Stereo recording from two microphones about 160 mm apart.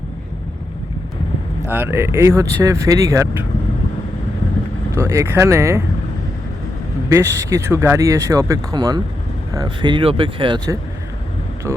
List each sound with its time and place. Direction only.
1.6 s speech: 15° right (ahead or behind)
4.9 s speech: 15° right (ahead or behind)
7.1 s speech: 15° right (ahead or behind); by 10.6 s 30° right (ahead or behind)